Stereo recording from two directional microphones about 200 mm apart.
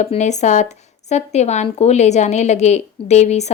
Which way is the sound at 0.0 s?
35° left (ahead or behind).